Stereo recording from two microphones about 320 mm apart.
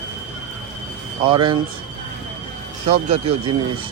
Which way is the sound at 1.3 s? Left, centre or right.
Centre.